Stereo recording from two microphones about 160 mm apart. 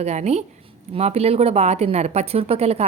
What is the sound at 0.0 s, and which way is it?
A woman's voice, 45° right (ahead or behind).